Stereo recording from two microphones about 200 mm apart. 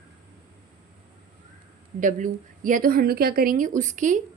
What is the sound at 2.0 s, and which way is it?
Speech, 40° right (ahead or behind).